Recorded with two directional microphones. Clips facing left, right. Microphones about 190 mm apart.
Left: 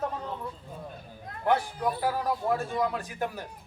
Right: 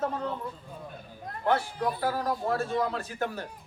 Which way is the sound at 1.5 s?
15° left (ahead or behind).